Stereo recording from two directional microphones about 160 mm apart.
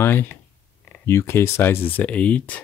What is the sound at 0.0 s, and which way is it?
Speech, 15° left (ahead or behind).